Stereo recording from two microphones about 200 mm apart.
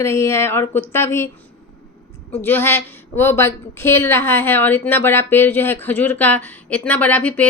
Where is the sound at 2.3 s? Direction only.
10° left (ahead or behind).